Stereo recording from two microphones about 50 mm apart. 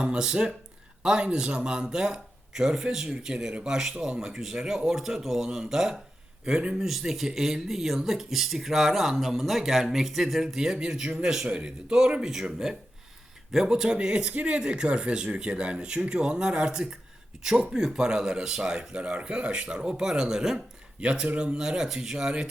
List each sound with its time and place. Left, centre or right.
0.0 s speech: centre
6.4 s a man's voice: centre
6.7 s speech: centre
21.0 s speech: right